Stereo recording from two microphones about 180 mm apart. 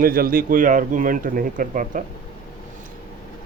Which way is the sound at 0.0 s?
55° right (ahead or behind).